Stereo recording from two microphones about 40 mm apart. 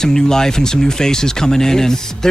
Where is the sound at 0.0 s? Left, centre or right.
Centre.